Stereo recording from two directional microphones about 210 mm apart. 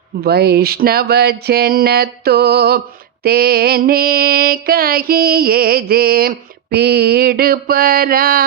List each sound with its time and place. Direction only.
0.2 s speech: 50° right (ahead or behind)